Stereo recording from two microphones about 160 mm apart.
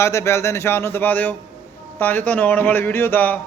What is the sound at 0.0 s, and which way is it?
A man's voice, 15° left (ahead or behind).